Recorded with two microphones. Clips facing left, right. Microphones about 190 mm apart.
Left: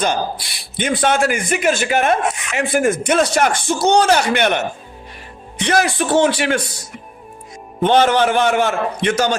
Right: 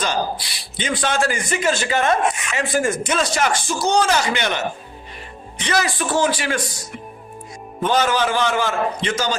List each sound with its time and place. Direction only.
0.0 s speech: 55° left (ahead or behind)
5.6 s speech: 60° left (ahead or behind)
7.8 s speech: 60° left (ahead or behind)